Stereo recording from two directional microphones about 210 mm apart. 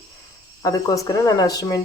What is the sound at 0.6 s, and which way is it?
Speech, 15° left (ahead or behind).